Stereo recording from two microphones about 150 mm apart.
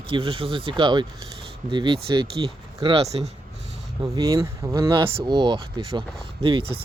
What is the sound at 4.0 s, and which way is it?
Speech, 25° right (ahead or behind).